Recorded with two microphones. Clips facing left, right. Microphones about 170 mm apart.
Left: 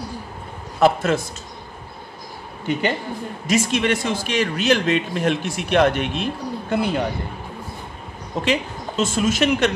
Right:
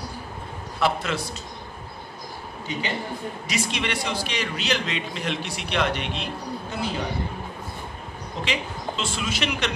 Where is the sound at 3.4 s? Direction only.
50° left (ahead or behind).